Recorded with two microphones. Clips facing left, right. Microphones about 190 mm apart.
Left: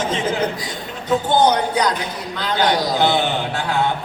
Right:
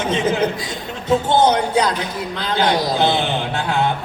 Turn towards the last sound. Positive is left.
turn(degrees=-25)  # may be behind; listen again after turning